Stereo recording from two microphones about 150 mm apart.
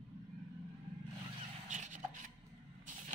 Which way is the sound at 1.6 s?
55° right (ahead or behind).